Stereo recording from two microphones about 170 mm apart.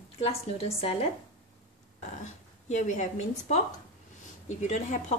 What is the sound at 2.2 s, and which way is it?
A woman's voice, 45° left (ahead or behind).